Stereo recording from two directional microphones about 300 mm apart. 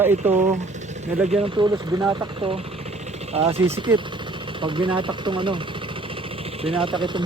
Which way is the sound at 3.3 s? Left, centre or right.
Centre.